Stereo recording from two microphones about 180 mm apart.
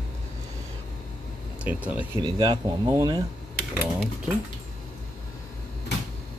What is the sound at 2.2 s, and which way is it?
Speech, 25° right (ahead or behind).